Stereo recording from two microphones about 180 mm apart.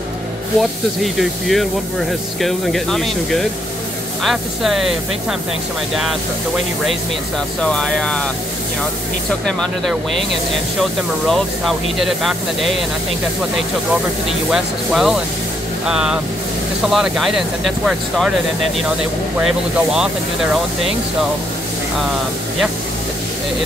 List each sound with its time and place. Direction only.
0.6 s speech: centre (ahead or behind)
5.9 s speech: centre (ahead or behind)
9.5 s speech: 5° left (ahead or behind)
14.5 s speech: 5° right (ahead or behind)